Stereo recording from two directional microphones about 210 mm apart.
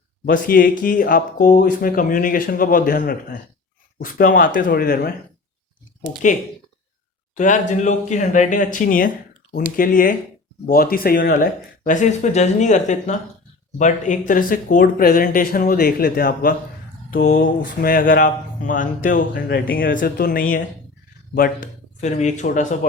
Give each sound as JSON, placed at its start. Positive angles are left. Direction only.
{"t": 0.3, "sound": "speech", "side_deg": 40}
{"t": 6.2, "sound": "speech", "side_deg": 35}